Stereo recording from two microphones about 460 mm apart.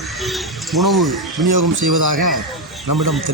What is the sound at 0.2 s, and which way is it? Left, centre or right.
Speech, centre.